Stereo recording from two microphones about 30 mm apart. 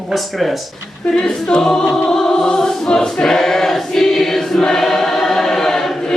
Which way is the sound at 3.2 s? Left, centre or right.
Centre.